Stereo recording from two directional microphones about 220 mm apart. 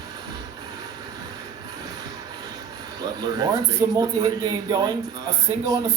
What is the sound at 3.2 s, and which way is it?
Speech, 20° right (ahead or behind).